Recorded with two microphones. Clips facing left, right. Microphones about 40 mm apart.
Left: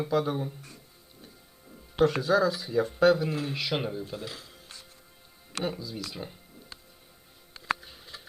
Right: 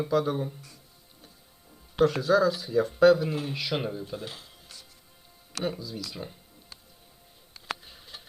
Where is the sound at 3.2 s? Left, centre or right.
Right.